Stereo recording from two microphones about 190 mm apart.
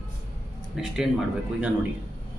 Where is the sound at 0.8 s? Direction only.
Centre (ahead or behind).